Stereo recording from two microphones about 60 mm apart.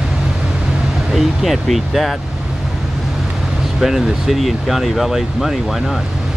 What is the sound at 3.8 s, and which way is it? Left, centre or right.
Speech, centre.